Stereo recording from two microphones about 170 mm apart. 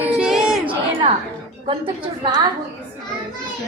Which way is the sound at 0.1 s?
5° right (ahead or behind).